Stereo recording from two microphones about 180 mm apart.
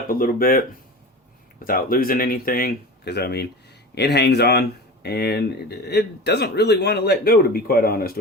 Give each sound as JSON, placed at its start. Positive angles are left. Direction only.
{"t": 0.1, "sound": "speech", "side_deg": 50}
{"t": 1.6, "sound": "speech", "side_deg": 55}